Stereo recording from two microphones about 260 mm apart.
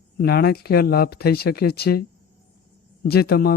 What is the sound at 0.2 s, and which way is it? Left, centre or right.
A man's voice, left.